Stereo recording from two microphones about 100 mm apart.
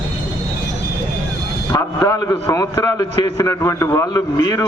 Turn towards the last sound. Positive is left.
turn(degrees=35)  # may be behind; listen again after turning